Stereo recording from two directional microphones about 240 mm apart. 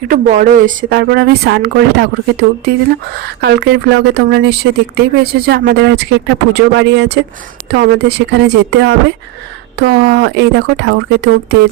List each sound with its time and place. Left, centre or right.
0.1 s a woman's voice: right